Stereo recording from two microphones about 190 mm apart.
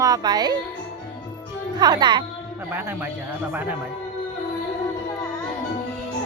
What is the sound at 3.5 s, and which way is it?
Speech, 10° right (ahead or behind).